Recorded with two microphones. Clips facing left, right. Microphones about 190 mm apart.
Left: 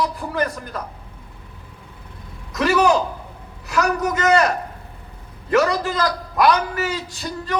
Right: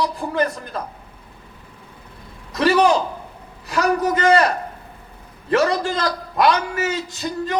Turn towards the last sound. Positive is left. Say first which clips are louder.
# right 2 dB
turn(degrees=-20)  # may be behind; listen again after turning